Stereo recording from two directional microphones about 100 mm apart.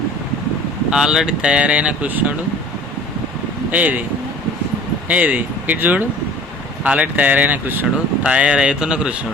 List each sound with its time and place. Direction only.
0.9 s speech: 5° right (ahead or behind)
3.7 s speech: 15° right (ahead or behind)
5.0 s speech: 15° right (ahead or behind)